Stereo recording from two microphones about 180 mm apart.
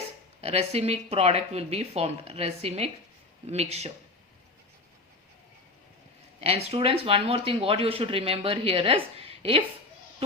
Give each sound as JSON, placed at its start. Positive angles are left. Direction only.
{"t": 0.4, "sound": "speech", "side_deg": -35}
{"t": 6.4, "sound": "speech", "side_deg": -35}